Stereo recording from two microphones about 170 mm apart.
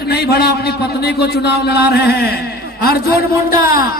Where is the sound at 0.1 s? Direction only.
70° left (ahead or behind).